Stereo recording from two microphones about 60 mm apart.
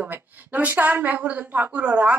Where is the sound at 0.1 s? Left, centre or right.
Right.